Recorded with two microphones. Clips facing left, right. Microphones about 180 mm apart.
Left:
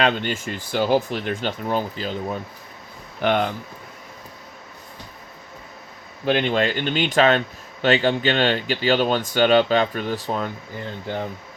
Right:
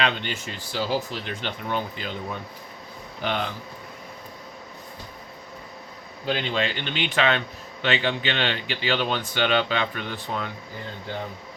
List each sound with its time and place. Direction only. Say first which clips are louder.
0.0 s speech: left 5 dB; 45° left (ahead or behind)
3.2 s speech: left 7 dB; 55° left (ahead or behind)
6.2 s speech: left 6 dB; 55° left (ahead or behind)